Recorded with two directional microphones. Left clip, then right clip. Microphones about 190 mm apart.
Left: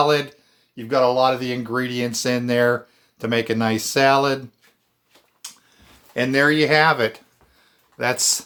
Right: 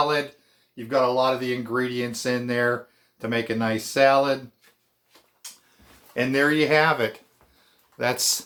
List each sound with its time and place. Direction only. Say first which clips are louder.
0.0 s speech: left 5 dB; 50° left (ahead or behind)
6.1 s speech: left 4 dB; 30° left (ahead or behind)
7.9 s speech: left 3 dB; 10° left (ahead or behind)